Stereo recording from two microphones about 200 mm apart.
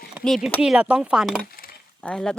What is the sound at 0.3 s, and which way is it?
Speech, centre (ahead or behind).